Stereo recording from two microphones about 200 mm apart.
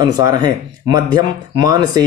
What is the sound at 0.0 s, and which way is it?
Speech, 20° right (ahead or behind).